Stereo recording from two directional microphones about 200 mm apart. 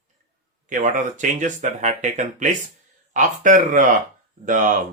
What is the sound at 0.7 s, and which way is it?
Speech, 40° right (ahead or behind).